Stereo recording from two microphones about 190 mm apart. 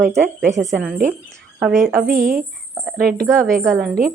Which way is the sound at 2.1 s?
50° right (ahead or behind).